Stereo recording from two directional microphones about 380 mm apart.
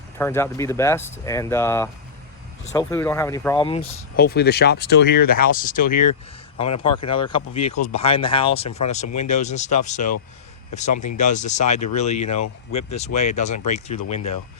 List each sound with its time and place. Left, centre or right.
0.2 s speech: centre
5.9 s speech: left
6.6 s speech: centre
9.0 s speech: left
9.3 s speech: centre
10.9 s speech: left
11.2 s speech: centre
14.2 s speech: left